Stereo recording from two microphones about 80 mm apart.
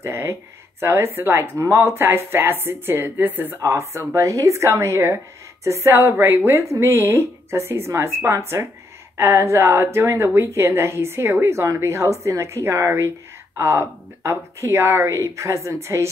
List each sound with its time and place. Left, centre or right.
0.0 s speech: right
3.5 s speech: right